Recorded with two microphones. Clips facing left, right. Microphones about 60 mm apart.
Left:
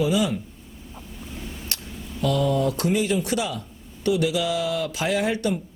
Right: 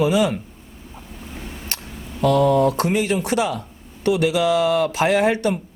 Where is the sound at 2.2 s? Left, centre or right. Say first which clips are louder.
Right 6 dB; right.